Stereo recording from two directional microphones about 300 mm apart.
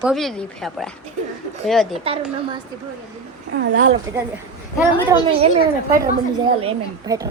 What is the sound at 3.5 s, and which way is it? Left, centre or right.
Speech, right.